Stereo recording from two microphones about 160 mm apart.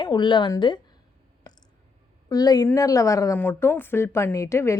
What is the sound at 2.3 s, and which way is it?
A woman's voice, 25° left (ahead or behind).